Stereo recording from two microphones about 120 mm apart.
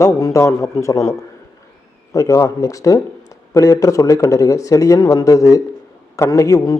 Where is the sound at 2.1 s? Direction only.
25° left (ahead or behind).